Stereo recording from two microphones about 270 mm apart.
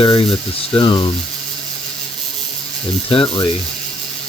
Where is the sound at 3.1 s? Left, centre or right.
Centre.